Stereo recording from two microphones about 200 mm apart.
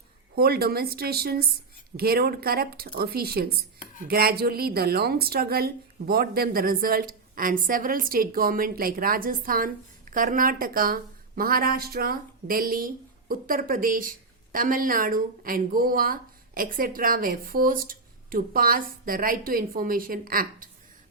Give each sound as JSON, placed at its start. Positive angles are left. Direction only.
{"t": 0.3, "sound": "a woman's voice", "side_deg": -50}